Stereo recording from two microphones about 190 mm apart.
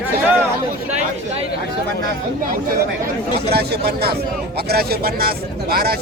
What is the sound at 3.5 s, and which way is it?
Speech, 55° right (ahead or behind).